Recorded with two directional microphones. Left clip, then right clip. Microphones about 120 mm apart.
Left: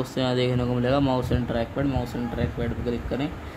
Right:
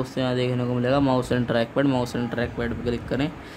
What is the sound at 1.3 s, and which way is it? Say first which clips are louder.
Speech: right 4 dB; 40° right (ahead or behind).